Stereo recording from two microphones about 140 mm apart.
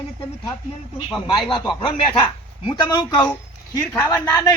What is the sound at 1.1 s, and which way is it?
Speech, 30° left (ahead or behind).